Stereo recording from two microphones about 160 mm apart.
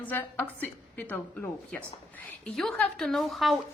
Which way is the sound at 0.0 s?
10° left (ahead or behind).